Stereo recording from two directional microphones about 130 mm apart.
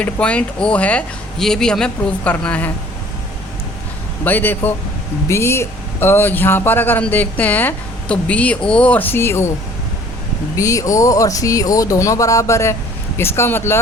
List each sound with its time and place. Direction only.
0.0 s speech: 10° left (ahead or behind)
4.2 s speech: 15° left (ahead or behind)
10.6 s speech: 25° left (ahead or behind)